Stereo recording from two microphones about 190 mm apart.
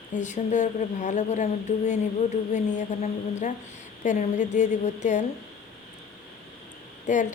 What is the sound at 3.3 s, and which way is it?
A woman's voice, 40° left (ahead or behind).